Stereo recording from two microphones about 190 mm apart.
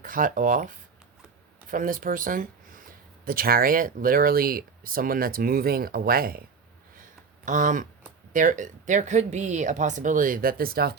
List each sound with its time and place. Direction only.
0.0 s speech: 45° right (ahead or behind)
1.7 s speech: 45° right (ahead or behind)
7.4 s speech: 45° right (ahead or behind)